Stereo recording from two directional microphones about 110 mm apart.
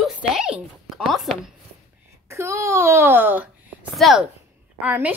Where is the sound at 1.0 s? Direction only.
Centre (ahead or behind).